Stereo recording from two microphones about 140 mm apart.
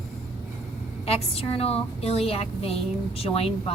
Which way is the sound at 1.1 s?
45° left (ahead or behind).